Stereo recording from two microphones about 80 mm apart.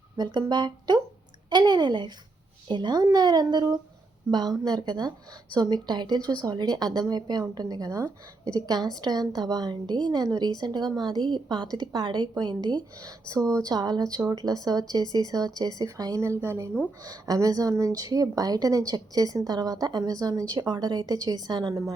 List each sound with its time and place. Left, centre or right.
0.2 s speech: right
3.0 s a woman's voice: right
13.0 s a woman's voice: right
13.7 s a woman's voice: right
16.2 s speech: right
17.0 s a woman's voice: right